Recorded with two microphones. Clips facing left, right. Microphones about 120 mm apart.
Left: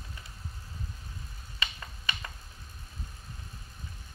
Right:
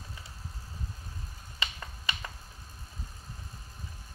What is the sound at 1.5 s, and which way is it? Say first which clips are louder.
Finger snapping: even; 15° right (ahead or behind).